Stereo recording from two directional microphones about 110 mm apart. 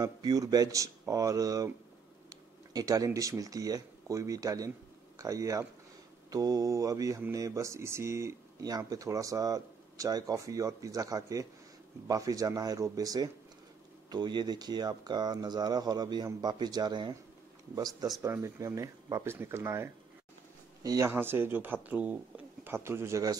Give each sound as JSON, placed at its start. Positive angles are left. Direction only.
{"t": 0.0, "sound": "speech", "side_deg": -35}
{"t": 2.7, "sound": "speech", "side_deg": -35}
{"t": 17.8, "sound": "speech", "side_deg": 0}
{"t": 18.2, "sound": "speech", "side_deg": -25}
{"t": 21.1, "sound": "speech", "side_deg": -20}